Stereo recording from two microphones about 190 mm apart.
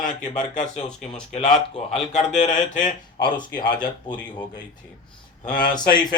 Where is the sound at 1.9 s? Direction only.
35° left (ahead or behind).